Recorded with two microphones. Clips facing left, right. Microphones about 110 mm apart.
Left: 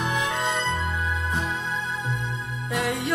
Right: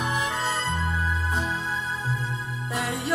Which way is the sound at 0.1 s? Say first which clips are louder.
Left 1 dB; centre (ahead or behind).